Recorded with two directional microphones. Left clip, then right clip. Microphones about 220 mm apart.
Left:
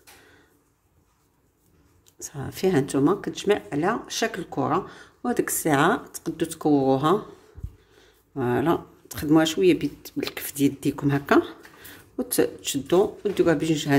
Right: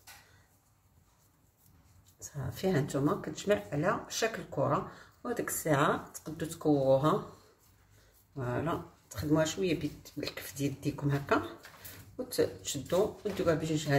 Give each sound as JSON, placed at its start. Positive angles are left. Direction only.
{"t": 2.2, "sound": "speech", "side_deg": 45}
{"t": 8.4, "sound": "speech", "side_deg": 50}